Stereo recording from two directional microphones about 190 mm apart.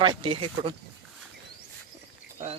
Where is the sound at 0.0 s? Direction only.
25° right (ahead or behind).